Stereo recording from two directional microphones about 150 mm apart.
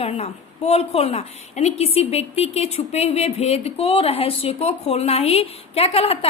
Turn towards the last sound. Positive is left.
turn(degrees=40)  # may be behind; listen again after turning